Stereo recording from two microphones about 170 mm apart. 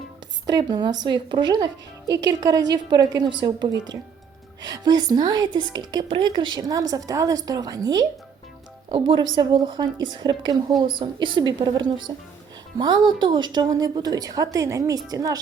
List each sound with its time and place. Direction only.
0.4 s speech: 25° right (ahead or behind)